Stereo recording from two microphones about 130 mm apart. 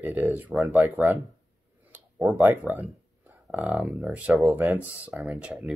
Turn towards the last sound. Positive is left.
turn(degrees=-5)  # may be behind; listen again after turning